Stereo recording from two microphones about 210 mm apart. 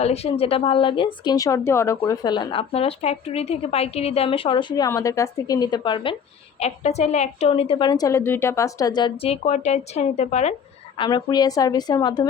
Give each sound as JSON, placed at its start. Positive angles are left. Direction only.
{"t": 0.0, "sound": "speech", "side_deg": 30}
{"t": 10.9, "sound": "speech", "side_deg": 20}